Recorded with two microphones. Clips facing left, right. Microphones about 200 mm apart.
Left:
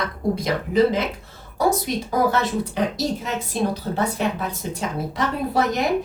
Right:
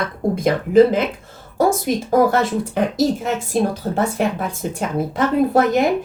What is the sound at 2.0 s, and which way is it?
Speech, 50° right (ahead or behind).